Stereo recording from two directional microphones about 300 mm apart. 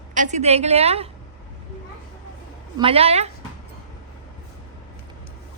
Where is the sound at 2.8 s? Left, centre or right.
Centre.